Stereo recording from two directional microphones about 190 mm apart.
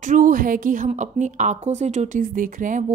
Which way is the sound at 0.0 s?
45° right (ahead or behind).